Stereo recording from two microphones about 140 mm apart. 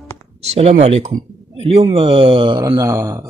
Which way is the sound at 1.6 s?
40° right (ahead or behind).